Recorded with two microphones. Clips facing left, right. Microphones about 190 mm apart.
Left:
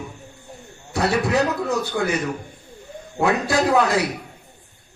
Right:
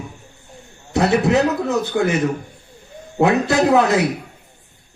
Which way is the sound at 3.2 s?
20° right (ahead or behind).